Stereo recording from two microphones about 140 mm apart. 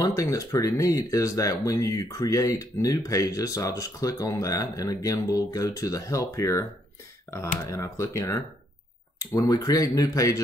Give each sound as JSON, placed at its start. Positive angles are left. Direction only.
{"t": 0.0, "sound": "speech", "side_deg": 25}